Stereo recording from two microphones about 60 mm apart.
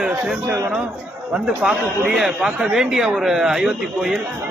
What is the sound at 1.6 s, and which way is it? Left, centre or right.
A man's voice, centre.